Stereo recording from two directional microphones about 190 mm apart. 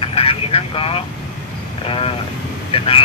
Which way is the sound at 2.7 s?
30° left (ahead or behind).